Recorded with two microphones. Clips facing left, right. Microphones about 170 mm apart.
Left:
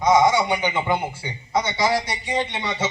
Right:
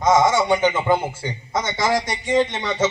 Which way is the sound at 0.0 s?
45° right (ahead or behind).